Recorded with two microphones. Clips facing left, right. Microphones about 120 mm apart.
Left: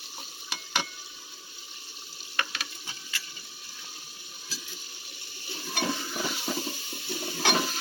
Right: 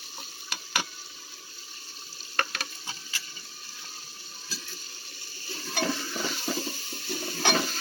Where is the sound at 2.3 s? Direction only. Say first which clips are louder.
Right 2 dB; 50° right (ahead or behind).